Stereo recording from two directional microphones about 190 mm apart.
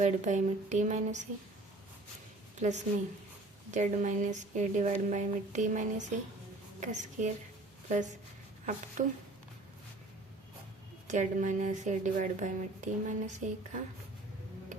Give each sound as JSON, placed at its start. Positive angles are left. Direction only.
{"t": 0.0, "sound": "speech", "side_deg": -40}
{"t": 2.6, "sound": "speech", "side_deg": -40}
{"t": 11.1, "sound": "speech", "side_deg": -40}